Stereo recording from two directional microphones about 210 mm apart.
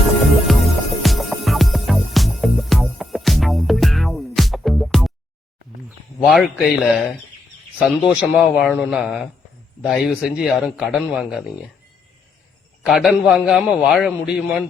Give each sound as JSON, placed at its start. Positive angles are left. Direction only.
{"t": 0.5, "sound": "music", "side_deg": 0}
{"t": 6.1, "sound": "a man's voice", "side_deg": 5}
{"t": 12.8, "sound": "a man's voice", "side_deg": 0}